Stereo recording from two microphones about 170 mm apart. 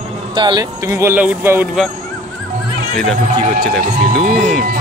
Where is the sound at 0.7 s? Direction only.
15° right (ahead or behind).